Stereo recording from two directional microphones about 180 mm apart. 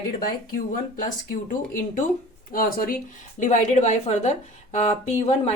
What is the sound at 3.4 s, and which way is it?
A woman's voice, 40° left (ahead or behind).